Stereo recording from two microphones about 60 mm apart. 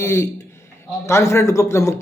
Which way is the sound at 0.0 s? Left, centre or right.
Left.